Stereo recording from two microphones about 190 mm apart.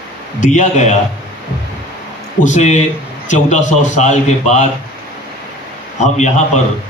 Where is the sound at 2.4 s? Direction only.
40° left (ahead or behind).